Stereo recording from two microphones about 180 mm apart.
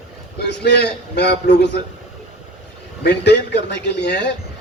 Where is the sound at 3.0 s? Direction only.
65° left (ahead or behind).